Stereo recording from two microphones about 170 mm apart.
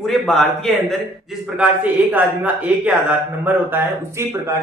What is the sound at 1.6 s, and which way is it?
Speech, 10° right (ahead or behind).